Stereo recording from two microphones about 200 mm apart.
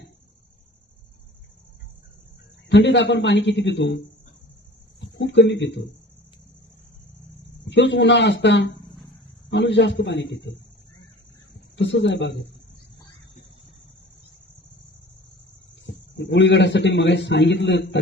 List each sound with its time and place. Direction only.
2.6 s a man's voice: 60° left (ahead or behind)
7.7 s a man's voice: 60° left (ahead or behind)
15.9 s a man's voice: 65° left (ahead or behind)